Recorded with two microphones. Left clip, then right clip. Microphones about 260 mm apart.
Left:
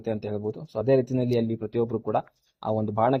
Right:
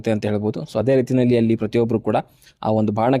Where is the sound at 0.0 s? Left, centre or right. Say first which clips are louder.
Right 8 dB; right.